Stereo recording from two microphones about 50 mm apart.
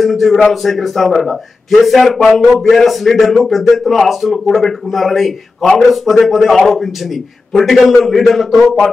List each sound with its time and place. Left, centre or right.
0.0 s a man's voice: centre